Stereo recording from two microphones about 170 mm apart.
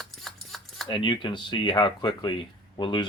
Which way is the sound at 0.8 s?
30° left (ahead or behind).